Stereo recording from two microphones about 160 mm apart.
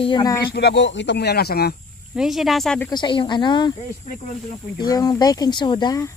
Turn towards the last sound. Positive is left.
turn(degrees=25)  # may be behind; listen again after turning